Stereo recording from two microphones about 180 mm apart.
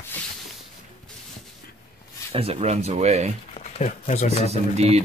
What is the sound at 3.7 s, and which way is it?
Speech, 35° left (ahead or behind).